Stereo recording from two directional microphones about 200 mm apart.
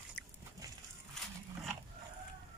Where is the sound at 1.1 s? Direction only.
Centre (ahead or behind).